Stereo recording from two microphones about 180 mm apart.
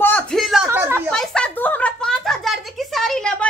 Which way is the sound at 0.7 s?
10° right (ahead or behind).